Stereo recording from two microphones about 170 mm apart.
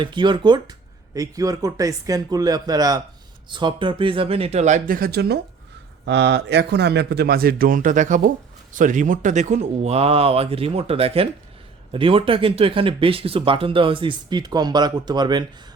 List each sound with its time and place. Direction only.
0.0 s speech: 25° right (ahead or behind); by 5.4 s 70° right (ahead or behind)
6.1 s a man's voice: 85° right; by 15.4 s 25° right (ahead or behind)